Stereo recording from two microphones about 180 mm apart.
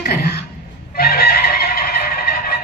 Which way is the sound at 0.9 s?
60° left (ahead or behind).